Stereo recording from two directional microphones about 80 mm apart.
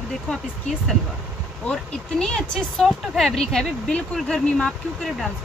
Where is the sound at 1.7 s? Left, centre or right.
Centre.